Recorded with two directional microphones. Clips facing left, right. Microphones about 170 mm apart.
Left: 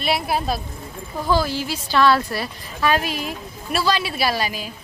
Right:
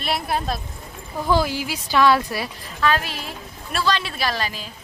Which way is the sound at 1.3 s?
15° right (ahead or behind).